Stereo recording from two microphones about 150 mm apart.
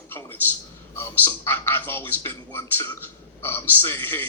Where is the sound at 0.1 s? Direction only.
15° left (ahead or behind).